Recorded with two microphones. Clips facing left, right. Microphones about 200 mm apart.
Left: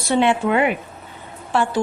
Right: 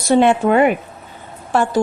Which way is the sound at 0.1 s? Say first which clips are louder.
Right 5 dB; 45° right (ahead or behind).